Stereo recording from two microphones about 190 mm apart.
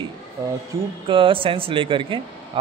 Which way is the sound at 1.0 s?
25° right (ahead or behind).